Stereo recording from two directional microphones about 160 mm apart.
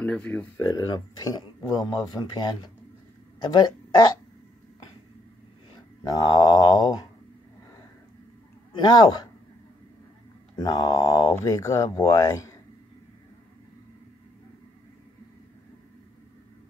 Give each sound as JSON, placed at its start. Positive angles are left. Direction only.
{"t": 0.0, "sound": "speech", "side_deg": 10}
{"t": 0.6, "sound": "speech", "side_deg": 20}
{"t": 5.8, "sound": "speech", "side_deg": 25}
{"t": 8.7, "sound": "speech", "side_deg": 25}
{"t": 10.6, "sound": "speech", "side_deg": 25}